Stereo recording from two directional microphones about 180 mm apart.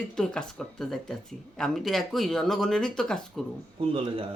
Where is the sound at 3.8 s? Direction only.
30° right (ahead or behind).